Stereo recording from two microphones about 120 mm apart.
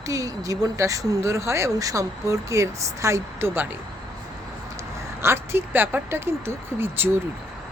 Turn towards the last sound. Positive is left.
turn(degrees=-20)  # may be behind; listen again after turning